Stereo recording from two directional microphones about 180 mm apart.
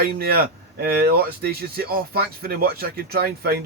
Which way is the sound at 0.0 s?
55° right (ahead or behind).